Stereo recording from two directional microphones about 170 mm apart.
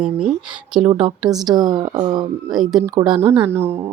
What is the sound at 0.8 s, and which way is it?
Speech, 40° right (ahead or behind).